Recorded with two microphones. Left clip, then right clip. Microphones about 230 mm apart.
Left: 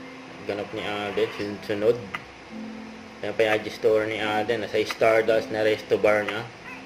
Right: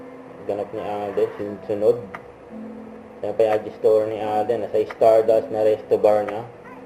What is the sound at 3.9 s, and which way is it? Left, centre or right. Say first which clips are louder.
Speech: right 4 dB; left.